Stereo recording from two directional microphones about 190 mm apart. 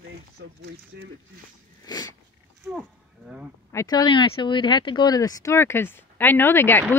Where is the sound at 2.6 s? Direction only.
5° right (ahead or behind).